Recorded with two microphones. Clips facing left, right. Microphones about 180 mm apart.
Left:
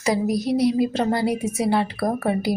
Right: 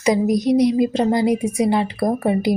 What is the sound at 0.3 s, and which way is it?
A woman's voice, 5° left (ahead or behind).